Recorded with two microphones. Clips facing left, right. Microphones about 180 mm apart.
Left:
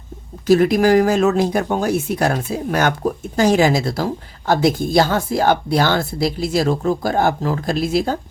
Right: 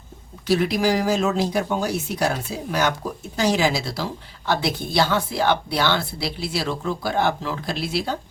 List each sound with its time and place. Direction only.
0.4 s speech: 45° left (ahead or behind)